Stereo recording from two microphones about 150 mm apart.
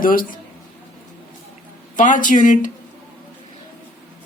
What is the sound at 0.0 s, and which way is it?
Speech, 70° left (ahead or behind).